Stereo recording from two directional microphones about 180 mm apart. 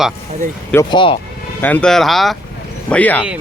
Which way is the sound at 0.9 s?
25° left (ahead or behind).